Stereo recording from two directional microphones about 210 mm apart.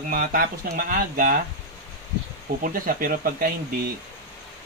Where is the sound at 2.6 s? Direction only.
40° right (ahead or behind).